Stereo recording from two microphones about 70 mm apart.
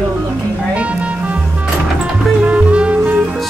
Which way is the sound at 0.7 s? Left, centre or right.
Centre.